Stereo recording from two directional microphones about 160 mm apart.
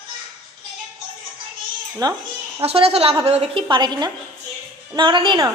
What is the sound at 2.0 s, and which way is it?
Speech, 25° right (ahead or behind).